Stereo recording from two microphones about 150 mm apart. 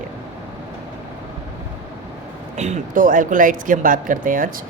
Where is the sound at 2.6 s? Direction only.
60° right (ahead or behind).